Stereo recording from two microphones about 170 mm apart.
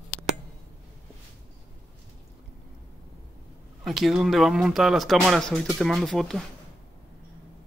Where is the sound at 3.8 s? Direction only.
Centre (ahead or behind).